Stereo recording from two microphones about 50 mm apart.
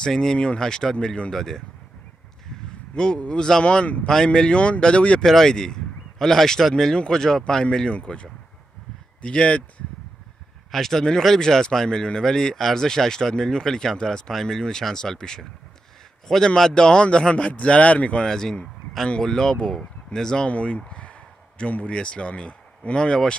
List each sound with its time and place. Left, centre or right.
0.0 s speech: centre
0.9 s speech: left
1.3 s speech: centre
2.9 s speech: centre
3.8 s speech: left
4.1 s speech: centre
5.2 s speech: centre
7.6 s speech: left
10.7 s speech: centre; by 18.2 s left
18.2 s speech: centre
20.4 s speech: left